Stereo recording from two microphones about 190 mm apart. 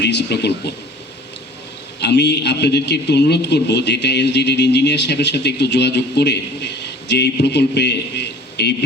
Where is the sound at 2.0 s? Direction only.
65° left (ahead or behind).